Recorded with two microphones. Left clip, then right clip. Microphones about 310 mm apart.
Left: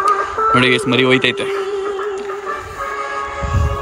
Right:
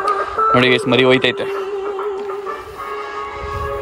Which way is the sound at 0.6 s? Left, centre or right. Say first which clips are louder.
Even; centre.